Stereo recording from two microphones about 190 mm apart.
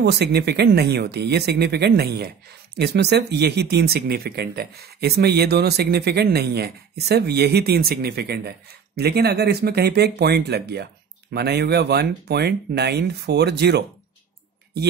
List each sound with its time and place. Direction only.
0.0 s speech: 60° right (ahead or behind)